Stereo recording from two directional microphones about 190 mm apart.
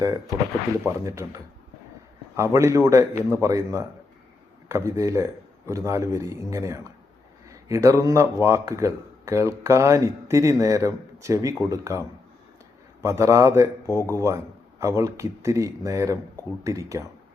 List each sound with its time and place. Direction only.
0.9 s speech: 15° right (ahead or behind)
13.8 s speech: 15° left (ahead or behind)
14.1 s speech: 15° right (ahead or behind)